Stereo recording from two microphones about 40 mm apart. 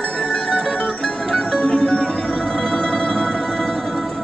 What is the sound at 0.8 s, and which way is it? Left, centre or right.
Music, centre.